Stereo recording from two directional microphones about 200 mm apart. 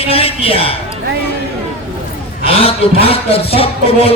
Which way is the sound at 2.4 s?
30° left (ahead or behind).